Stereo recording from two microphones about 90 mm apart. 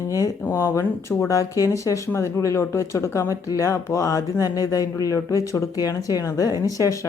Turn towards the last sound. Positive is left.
turn(degrees=40)  # may be behind; listen again after turning